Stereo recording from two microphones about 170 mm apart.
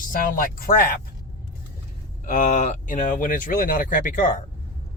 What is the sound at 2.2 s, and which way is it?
Speech, 50° left (ahead or behind).